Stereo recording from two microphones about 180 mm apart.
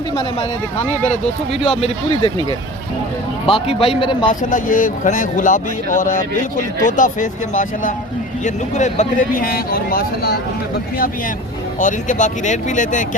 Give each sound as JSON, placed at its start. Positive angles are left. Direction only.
{"t": 1.5, "sound": "a man's voice", "side_deg": 30}
{"t": 3.4, "sound": "a man's voice", "side_deg": 30}
{"t": 4.3, "sound": "speech", "side_deg": 45}
{"t": 11.8, "sound": "speech", "side_deg": 45}